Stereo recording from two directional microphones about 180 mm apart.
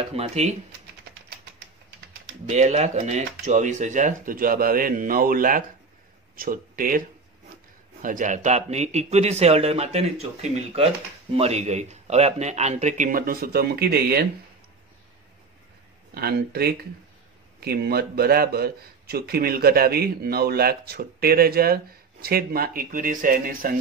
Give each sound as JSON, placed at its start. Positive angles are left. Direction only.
{"t": 0.1, "sound": "speech", "side_deg": -35}
{"t": 2.4, "sound": "speech", "side_deg": -40}
{"t": 8.0, "sound": "speech", "side_deg": -45}
{"t": 16.2, "sound": "a man's voice", "side_deg": -60}